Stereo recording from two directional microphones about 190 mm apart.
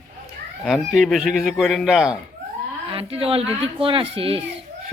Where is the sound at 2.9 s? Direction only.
30° right (ahead or behind).